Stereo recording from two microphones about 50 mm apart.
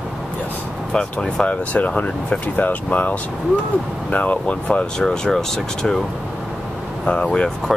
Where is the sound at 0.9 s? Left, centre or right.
Centre.